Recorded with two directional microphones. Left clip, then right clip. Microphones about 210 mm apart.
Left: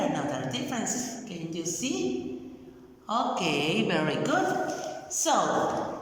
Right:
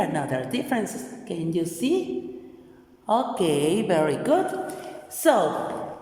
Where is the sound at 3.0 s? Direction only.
35° right (ahead or behind).